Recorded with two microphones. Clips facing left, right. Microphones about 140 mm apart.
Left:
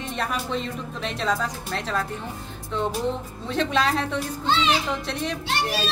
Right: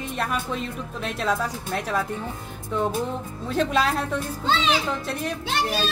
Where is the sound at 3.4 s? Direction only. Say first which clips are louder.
Right 1 dB; 5° right (ahead or behind).